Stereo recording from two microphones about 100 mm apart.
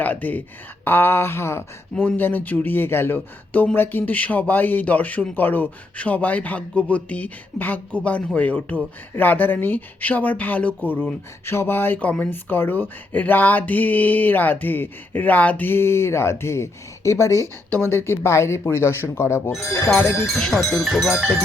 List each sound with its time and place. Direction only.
0.0 s speech: 15° left (ahead or behind)
17.7 s speech: 20° left (ahead or behind)
20.2 s speech: centre (ahead or behind)